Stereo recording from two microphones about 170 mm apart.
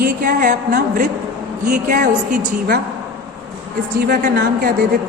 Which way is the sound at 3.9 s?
60° right (ahead or behind).